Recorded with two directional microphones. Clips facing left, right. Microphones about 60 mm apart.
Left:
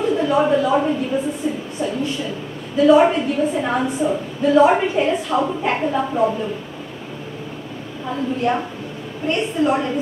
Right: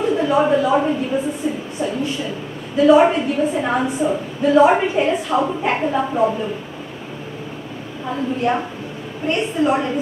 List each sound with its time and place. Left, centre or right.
0.0 s speech: right
1.1 s a woman's voice: centre
2.8 s a woman's voice: right
8.1 s a woman's voice: right